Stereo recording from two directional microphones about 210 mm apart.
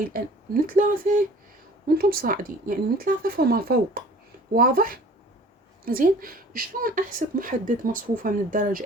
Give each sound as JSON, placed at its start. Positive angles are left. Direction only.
{"t": 0.1, "sound": "speech", "side_deg": -40}